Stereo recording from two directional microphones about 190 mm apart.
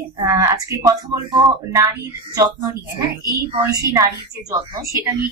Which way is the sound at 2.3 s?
20° right (ahead or behind).